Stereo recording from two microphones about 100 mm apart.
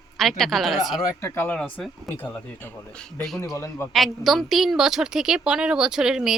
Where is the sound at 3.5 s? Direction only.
25° left (ahead or behind).